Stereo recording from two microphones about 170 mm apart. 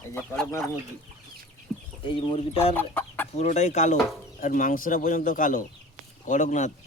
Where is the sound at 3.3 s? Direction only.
40° left (ahead or behind).